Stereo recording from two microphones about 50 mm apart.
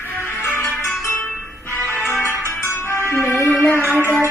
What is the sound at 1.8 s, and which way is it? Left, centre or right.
Music, left.